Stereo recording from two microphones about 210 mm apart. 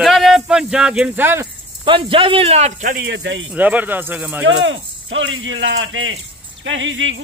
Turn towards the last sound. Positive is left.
turn(degrees=-65)  # may be behind; listen again after turning